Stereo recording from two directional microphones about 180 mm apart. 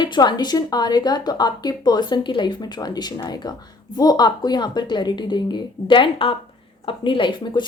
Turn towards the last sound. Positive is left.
turn(degrees=25)  # may be behind; listen again after turning